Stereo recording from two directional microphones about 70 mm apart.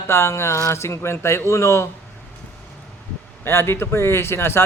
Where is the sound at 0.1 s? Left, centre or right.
Left.